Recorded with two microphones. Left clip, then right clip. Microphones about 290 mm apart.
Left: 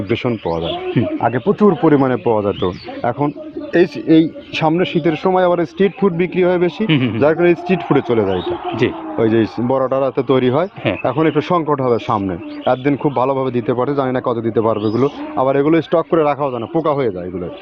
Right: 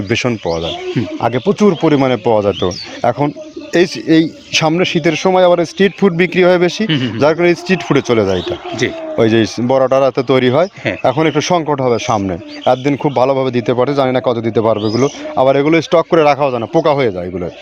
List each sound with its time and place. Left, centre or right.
0.1 s a man's voice: right